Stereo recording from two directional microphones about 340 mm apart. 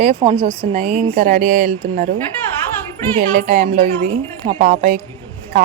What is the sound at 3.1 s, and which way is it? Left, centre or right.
A woman's voice, right.